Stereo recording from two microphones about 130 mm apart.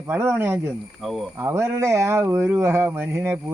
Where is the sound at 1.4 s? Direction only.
20° right (ahead or behind).